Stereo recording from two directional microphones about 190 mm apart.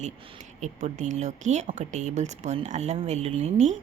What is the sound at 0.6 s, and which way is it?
Speech, 40° right (ahead or behind).